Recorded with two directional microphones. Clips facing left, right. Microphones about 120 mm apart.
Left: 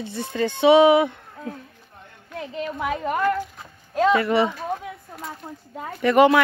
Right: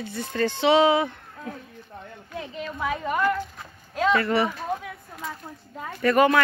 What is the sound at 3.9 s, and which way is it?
Speech, 25° left (ahead or behind).